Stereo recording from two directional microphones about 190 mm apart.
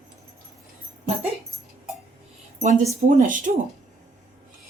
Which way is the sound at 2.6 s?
35° right (ahead or behind).